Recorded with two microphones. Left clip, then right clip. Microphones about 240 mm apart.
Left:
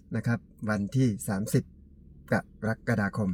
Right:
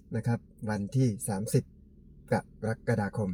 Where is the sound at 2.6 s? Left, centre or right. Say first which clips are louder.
Left 2 dB; centre.